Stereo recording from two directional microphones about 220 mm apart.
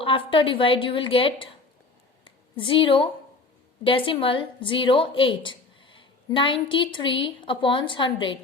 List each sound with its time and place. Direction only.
0.0 s a woman's voice: 25° left (ahead or behind)